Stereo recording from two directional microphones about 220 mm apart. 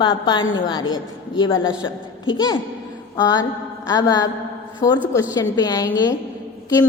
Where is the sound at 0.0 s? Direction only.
20° left (ahead or behind).